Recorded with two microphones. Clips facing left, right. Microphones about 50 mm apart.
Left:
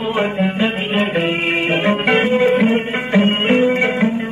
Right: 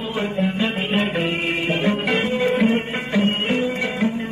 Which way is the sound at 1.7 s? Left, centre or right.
Left.